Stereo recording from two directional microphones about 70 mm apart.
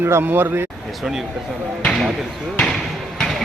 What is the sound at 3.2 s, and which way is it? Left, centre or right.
Vehicle, centre.